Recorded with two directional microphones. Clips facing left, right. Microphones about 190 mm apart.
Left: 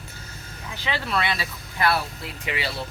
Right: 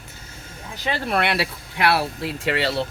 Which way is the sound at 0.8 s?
50° right (ahead or behind).